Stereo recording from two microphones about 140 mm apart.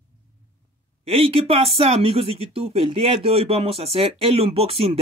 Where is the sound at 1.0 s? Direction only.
45° right (ahead or behind).